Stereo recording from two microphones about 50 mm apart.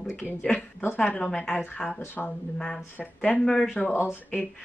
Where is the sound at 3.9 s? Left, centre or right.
Left.